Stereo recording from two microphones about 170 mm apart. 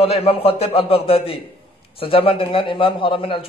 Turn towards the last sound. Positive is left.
turn(degrees=30)  # may be behind; listen again after turning